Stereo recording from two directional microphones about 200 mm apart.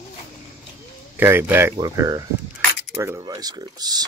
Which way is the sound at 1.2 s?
10° right (ahead or behind).